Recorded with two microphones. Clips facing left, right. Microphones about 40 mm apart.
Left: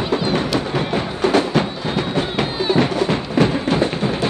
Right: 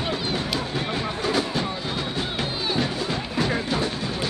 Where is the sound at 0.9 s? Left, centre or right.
Left.